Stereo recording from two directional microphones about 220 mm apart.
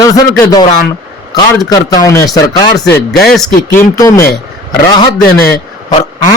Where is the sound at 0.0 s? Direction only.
15° left (ahead or behind).